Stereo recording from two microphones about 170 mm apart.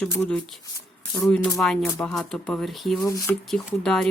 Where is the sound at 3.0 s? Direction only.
20° left (ahead or behind).